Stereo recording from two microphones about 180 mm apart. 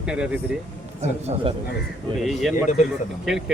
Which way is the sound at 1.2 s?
35° right (ahead or behind).